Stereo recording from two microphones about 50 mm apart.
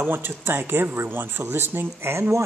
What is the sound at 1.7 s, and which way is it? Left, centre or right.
Speech, right.